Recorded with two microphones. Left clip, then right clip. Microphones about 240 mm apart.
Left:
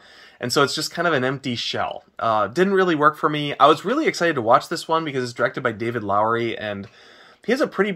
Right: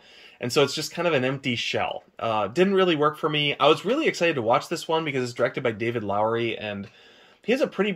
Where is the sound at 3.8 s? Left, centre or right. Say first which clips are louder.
Left 2 dB; centre.